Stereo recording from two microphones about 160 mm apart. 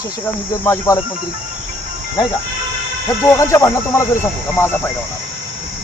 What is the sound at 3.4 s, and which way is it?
Speech, 15° left (ahead or behind).